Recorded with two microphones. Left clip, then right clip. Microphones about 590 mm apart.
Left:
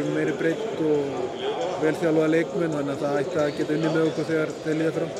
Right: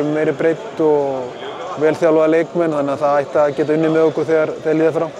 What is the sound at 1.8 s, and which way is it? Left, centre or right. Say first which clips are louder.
Speech: right 10 dB; right.